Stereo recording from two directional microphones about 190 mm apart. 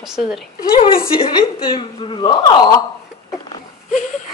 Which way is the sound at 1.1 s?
25° left (ahead or behind).